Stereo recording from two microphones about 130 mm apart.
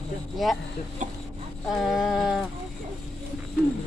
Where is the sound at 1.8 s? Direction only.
5° right (ahead or behind).